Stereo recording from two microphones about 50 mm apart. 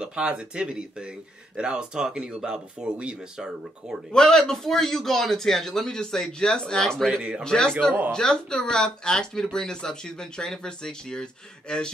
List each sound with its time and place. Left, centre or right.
0.0 s speech: centre
4.1 s speech: centre
7.2 s speech: centre
7.4 s speech: centre